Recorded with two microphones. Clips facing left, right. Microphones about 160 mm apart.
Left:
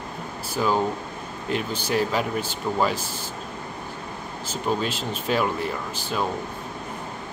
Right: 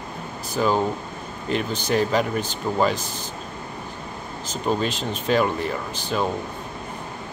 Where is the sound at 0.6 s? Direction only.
5° left (ahead or behind).